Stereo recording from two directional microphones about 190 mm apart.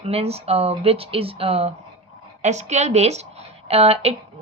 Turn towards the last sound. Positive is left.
turn(degrees=-35)  # may be behind; listen again after turning